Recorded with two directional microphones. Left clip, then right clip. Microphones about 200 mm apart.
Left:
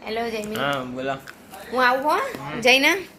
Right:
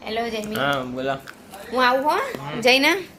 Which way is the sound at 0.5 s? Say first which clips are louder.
Right 3 dB; 15° right (ahead or behind).